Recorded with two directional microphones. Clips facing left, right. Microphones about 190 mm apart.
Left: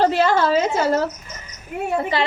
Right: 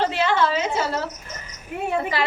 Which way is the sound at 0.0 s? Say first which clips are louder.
Left 4 dB; 40° left (ahead or behind).